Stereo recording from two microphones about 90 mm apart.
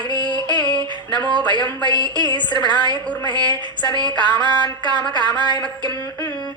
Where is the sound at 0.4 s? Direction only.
55° left (ahead or behind).